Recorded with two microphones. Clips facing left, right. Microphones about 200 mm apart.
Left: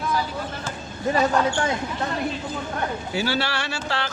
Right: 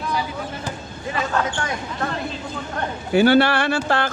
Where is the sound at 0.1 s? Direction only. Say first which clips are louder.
Right 1 dB; 15° right (ahead or behind).